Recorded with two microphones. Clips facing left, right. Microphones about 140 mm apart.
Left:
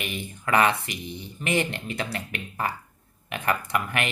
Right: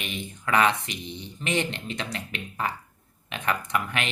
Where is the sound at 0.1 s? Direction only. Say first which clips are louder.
Left 1 dB; 5° left (ahead or behind).